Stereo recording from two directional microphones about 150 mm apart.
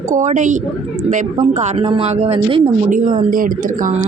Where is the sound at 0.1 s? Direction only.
55° right (ahead or behind).